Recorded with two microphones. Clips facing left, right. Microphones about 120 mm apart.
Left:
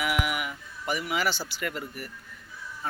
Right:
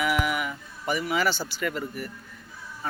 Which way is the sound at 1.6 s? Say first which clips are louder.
Right 4 dB; centre (ahead or behind).